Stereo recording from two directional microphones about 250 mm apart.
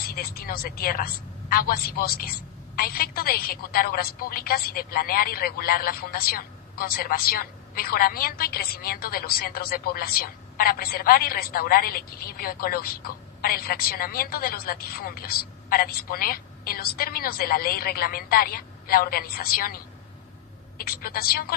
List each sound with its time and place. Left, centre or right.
0.0 s speech: left